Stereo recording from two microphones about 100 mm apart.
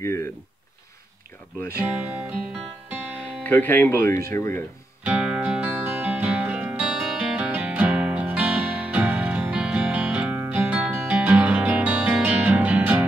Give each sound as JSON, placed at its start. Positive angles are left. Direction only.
{"t": 0.0, "sound": "speech", "side_deg": 30}
{"t": 1.8, "sound": "speech", "side_deg": -15}
{"t": 3.4, "sound": "speech", "side_deg": 20}
{"t": 5.0, "sound": "music", "side_deg": -10}